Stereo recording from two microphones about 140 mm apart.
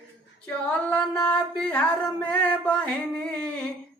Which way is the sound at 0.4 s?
10° left (ahead or behind).